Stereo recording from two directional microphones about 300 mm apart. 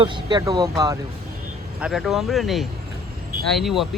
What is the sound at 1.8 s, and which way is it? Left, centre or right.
Speech, centre.